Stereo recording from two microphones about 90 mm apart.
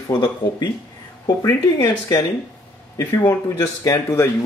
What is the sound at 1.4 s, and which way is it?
Speech, 45° left (ahead or behind).